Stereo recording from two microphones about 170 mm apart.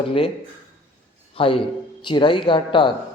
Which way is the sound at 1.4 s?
30° left (ahead or behind).